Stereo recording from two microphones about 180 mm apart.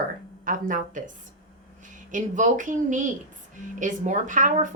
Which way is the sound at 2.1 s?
45° right (ahead or behind).